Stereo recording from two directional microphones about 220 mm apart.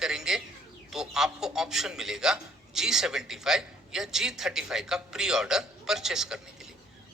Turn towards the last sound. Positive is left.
turn(degrees=0)  # may be behind; listen again after turning